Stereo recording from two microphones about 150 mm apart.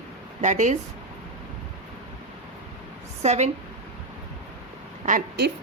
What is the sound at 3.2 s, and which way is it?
Speech, 50° right (ahead or behind).